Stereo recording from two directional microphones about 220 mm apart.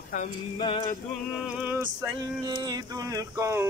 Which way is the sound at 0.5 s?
25° left (ahead or behind).